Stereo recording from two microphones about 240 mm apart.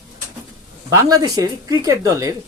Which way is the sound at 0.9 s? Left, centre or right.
Centre.